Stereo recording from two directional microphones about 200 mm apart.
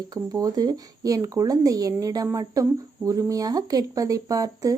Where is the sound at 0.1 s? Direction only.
20° right (ahead or behind).